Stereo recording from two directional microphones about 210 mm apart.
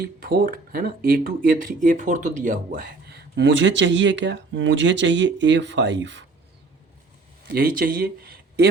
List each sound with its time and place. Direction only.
0.0 s speech: 45° right (ahead or behind); by 6.2 s 60° right (ahead or behind)
7.4 s speech: 45° right (ahead or behind)